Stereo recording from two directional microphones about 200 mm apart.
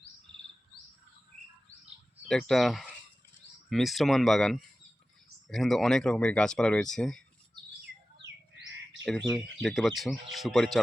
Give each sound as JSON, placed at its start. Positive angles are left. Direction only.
{"t": 2.2, "sound": "speech", "side_deg": 0}
{"t": 8.5, "sound": "chirp", "side_deg": -65}
{"t": 9.0, "sound": "speech", "side_deg": 0}